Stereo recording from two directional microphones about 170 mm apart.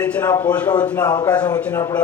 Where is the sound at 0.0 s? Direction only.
10° left (ahead or behind).